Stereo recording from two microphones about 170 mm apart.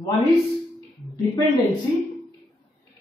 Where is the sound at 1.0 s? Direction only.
Centre (ahead or behind).